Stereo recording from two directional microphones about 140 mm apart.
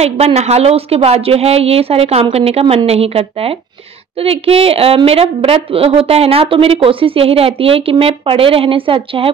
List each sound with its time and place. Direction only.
0.0 s a woman's voice: 50° right (ahead or behind)